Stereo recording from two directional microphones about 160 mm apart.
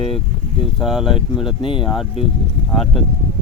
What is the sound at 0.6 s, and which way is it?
Speech, centre (ahead or behind).